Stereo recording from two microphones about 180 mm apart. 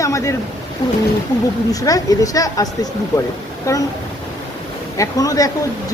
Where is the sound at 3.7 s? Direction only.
15° left (ahead or behind).